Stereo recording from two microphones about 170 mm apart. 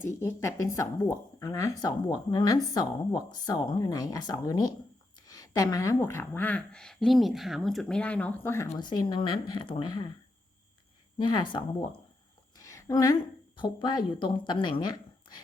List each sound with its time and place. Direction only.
0.0 s speech: 15° left (ahead or behind)
8.8 s speech: 25° left (ahead or behind)
11.2 s speech: 25° left (ahead or behind)
12.5 s a sound: 20° left (ahead or behind)
13.6 s speech: 25° left (ahead or behind)